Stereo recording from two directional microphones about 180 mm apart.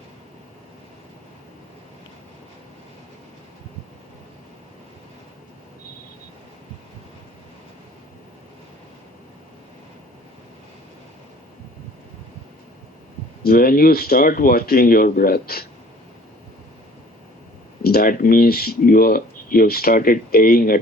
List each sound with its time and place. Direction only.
13.4 s speech: 55° left (ahead or behind)
17.8 s speech: 55° left (ahead or behind)